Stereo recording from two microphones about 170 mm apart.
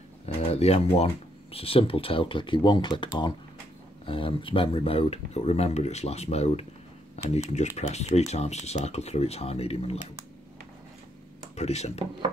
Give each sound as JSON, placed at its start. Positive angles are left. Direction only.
{"t": 0.4, "sound": "speech", "side_deg": 35}
{"t": 11.5, "sound": "speech", "side_deg": 40}